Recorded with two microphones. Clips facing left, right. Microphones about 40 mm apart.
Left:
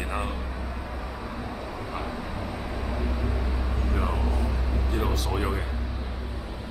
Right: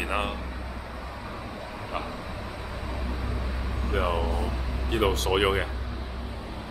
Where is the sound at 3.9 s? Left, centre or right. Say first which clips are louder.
Right 5 dB; right.